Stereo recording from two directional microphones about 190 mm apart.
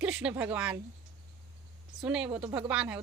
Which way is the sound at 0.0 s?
5° right (ahead or behind).